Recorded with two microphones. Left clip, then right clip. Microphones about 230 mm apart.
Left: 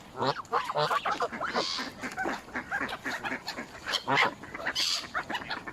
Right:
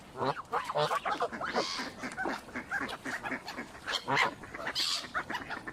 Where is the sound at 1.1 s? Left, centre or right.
Centre.